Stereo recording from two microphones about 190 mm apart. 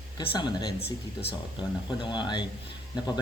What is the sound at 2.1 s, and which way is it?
Speech, 25° left (ahead or behind).